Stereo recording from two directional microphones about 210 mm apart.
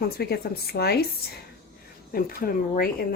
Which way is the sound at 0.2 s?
50° left (ahead or behind).